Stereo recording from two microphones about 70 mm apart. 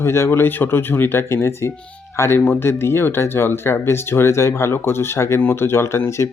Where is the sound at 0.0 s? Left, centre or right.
Left.